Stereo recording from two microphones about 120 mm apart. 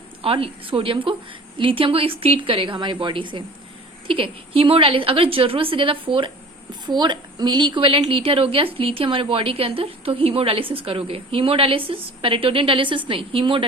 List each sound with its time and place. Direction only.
0.2 s a woman's voice: 50° right (ahead or behind)